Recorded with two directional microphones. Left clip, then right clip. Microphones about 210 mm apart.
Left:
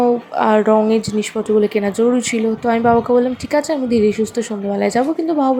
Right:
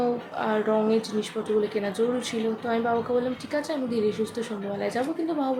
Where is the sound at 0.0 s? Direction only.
30° left (ahead or behind).